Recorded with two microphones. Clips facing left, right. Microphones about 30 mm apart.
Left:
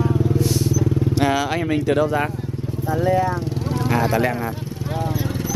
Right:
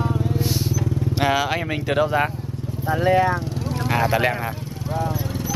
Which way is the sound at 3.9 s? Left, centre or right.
Right.